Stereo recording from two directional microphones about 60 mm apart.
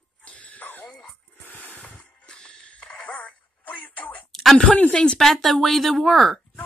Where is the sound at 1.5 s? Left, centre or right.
Left.